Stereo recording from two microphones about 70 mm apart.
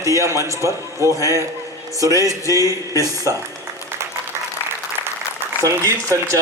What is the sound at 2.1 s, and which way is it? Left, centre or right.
Music, left.